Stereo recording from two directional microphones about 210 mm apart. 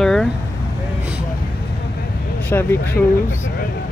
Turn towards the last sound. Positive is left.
turn(degrees=10)  # may be behind; listen again after turning